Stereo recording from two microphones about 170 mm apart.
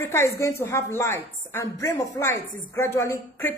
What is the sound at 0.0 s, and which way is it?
A woman's voice, 15° left (ahead or behind).